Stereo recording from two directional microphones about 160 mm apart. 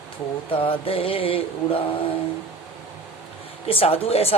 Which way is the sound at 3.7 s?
35° left (ahead or behind).